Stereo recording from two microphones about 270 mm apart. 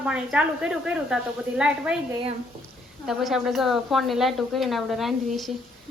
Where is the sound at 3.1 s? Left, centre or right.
Centre.